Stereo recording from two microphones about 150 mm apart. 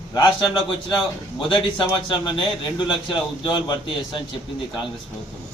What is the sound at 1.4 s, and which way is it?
A man's voice, 35° left (ahead or behind).